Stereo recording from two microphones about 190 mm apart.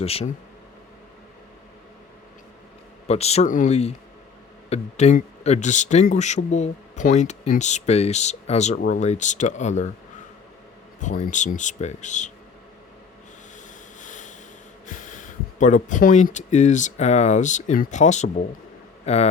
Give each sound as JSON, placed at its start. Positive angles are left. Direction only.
{"t": 0.0, "sound": "speech", "side_deg": 30}
{"t": 3.1, "sound": "speech", "side_deg": 35}
{"t": 11.0, "sound": "speech", "side_deg": 40}
{"t": 14.0, "sound": "a sound", "side_deg": 40}
{"t": 14.8, "sound": "a man's voice", "side_deg": 40}